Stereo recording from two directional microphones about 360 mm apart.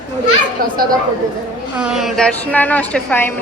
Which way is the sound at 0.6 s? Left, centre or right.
Right.